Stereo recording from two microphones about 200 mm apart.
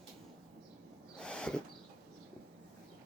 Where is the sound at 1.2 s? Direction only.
5° left (ahead or behind).